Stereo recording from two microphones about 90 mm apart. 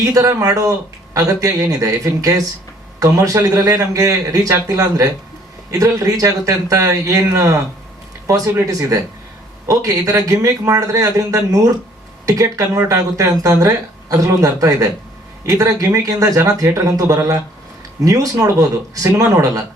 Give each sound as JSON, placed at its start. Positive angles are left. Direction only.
{"t": 0.0, "sound": "a man's voice", "side_deg": -40}